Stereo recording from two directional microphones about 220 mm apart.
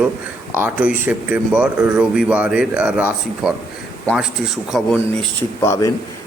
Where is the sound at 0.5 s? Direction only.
5° right (ahead or behind).